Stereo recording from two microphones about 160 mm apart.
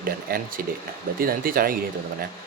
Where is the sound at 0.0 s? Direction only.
65° right (ahead or behind).